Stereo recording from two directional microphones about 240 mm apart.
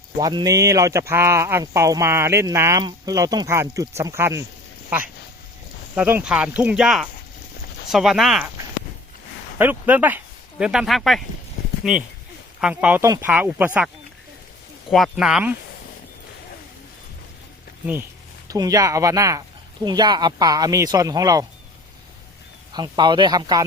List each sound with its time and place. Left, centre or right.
0.2 s speech: centre
5.9 s speech: centre
9.6 s speech: centre
18.4 s speech: centre
22.7 s speech: centre